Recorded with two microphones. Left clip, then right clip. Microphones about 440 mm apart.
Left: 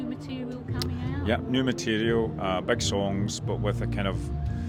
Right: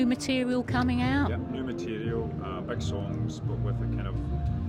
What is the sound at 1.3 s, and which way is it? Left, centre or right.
Speech, left.